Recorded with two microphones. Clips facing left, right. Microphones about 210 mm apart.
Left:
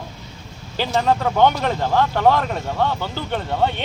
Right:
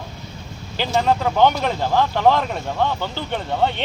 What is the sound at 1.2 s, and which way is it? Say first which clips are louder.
Speech: even; 5° right (ahead or behind).